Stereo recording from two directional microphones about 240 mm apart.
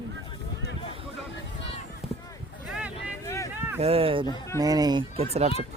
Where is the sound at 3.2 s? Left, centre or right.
Centre.